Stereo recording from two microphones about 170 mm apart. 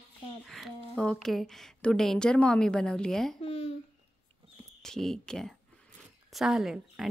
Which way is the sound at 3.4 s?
35° left (ahead or behind).